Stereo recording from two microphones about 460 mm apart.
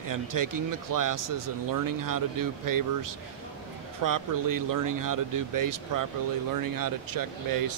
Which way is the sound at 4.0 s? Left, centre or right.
Right.